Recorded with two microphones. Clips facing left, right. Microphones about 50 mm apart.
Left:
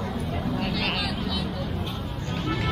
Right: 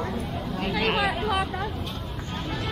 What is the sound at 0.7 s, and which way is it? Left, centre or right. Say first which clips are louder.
Vehicle: right 4 dB; centre.